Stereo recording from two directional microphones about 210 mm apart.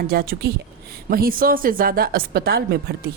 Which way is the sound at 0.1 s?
45° right (ahead or behind).